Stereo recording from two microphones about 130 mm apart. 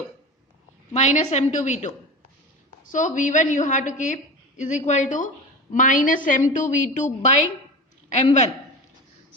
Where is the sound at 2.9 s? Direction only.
75° left (ahead or behind).